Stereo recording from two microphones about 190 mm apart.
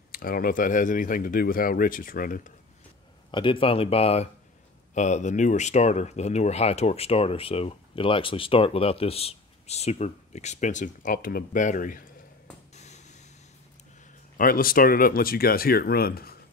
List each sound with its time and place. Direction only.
0.1 s speech: 50° left (ahead or behind)
3.3 s speech: 25° left (ahead or behind); by 12.0 s 40° left (ahead or behind)
12.7 s a sound: 35° left (ahead or behind)
14.3 s speech: 50° left (ahead or behind)